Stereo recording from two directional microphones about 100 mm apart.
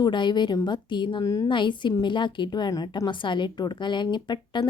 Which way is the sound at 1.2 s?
35° left (ahead or behind).